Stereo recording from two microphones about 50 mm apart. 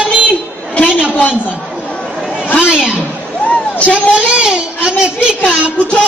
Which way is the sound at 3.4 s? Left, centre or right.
Left.